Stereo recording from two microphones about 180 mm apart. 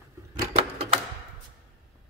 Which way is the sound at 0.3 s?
30° right (ahead or behind).